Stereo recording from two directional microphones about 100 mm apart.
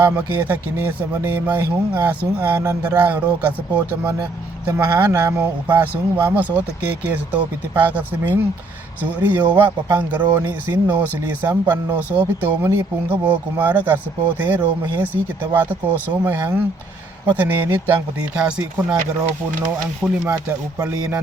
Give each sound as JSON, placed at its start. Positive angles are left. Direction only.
{"t": 0.0, "sound": "speech", "side_deg": -20}
{"t": 4.9, "sound": "speech", "side_deg": -15}
{"t": 20.0, "sound": "speech", "side_deg": -10}